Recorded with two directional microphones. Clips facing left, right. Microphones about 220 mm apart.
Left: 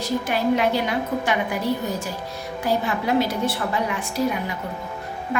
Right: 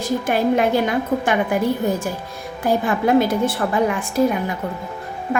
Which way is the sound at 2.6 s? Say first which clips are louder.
Right 5 dB; 50° right (ahead or behind).